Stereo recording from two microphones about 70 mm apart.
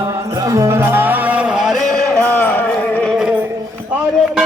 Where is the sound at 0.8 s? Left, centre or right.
Right; by 1.8 s centre.